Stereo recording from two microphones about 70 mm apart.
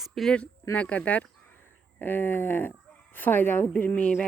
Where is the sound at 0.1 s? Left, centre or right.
Centre.